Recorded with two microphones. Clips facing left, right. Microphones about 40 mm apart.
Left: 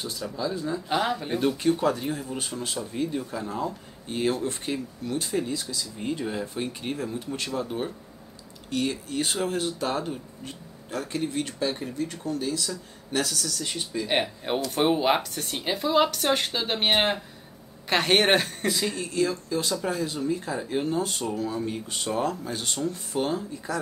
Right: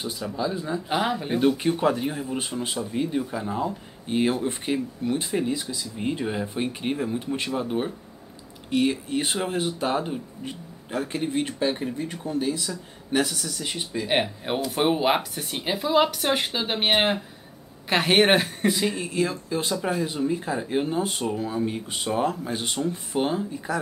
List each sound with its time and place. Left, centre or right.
0.0 s speech: centre